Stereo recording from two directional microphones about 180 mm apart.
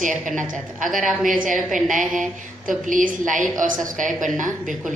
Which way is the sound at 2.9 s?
45° right (ahead or behind).